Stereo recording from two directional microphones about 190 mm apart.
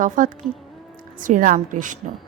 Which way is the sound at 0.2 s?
45° right (ahead or behind).